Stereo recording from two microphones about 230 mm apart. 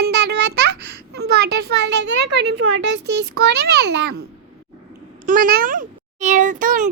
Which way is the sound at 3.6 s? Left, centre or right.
Right.